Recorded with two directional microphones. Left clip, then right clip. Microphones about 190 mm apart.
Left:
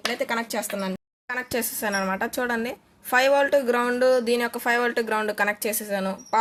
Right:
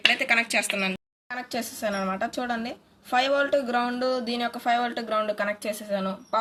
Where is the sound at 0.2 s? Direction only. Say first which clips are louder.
Right 4 dB; 40° left (ahead or behind).